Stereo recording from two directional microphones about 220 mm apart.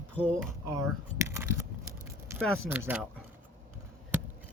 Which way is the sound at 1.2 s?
15° right (ahead or behind).